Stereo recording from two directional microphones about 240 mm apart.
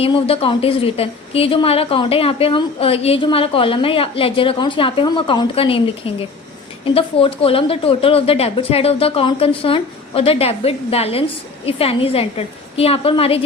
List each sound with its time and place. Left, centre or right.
0.0 s speech: left